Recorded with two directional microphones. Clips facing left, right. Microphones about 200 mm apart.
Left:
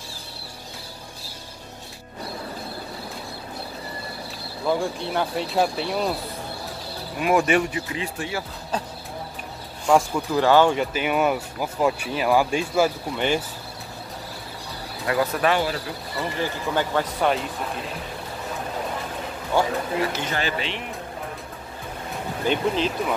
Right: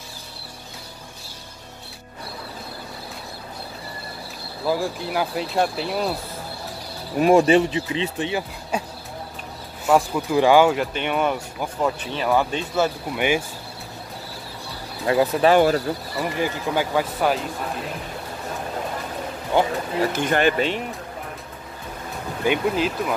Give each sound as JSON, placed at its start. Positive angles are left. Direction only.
{"t": 4.6, "sound": "speech", "side_deg": -5}
{"t": 7.2, "sound": "speech", "side_deg": -30}
{"t": 8.7, "sound": "speech", "side_deg": -10}
{"t": 13.1, "sound": "speech", "side_deg": -10}
{"t": 15.0, "sound": "speech", "side_deg": -25}
{"t": 15.5, "sound": "speech", "side_deg": -45}
{"t": 16.2, "sound": "speech", "side_deg": -10}
{"t": 19.5, "sound": "speech", "side_deg": -20}
{"t": 20.0, "sound": "speech", "side_deg": -50}
{"t": 22.5, "sound": "speech", "side_deg": -5}